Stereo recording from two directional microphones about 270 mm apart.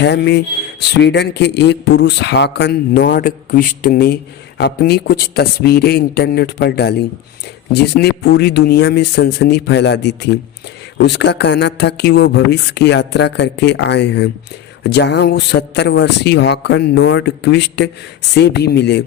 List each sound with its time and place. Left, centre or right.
0.0 s speech: left